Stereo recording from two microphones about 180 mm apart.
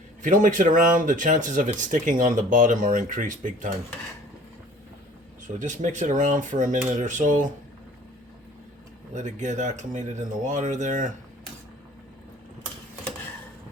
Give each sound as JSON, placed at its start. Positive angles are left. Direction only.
{"t": 0.2, "sound": "speech", "side_deg": -45}
{"t": 5.5, "sound": "speech", "side_deg": -45}
{"t": 9.1, "sound": "speech", "side_deg": -40}